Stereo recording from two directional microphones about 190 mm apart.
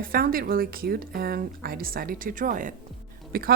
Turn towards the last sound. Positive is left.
turn(degrees=-50)  # may be behind; listen again after turning